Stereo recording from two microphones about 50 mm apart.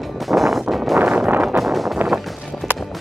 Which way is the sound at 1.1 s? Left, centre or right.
Right.